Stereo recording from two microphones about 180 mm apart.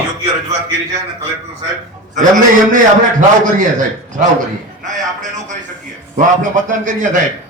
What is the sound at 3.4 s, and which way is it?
A man's voice, 45° right (ahead or behind).